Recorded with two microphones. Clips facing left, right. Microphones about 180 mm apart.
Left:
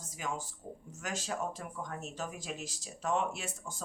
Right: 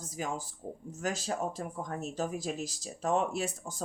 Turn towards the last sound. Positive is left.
turn(degrees=-40)  # may be behind; listen again after turning